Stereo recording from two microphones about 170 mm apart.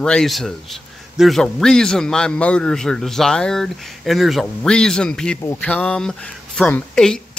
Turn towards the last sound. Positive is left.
turn(degrees=5)  # may be behind; listen again after turning